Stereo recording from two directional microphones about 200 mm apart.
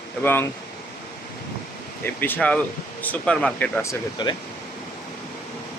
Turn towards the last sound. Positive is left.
turn(degrees=20)  # may be behind; listen again after turning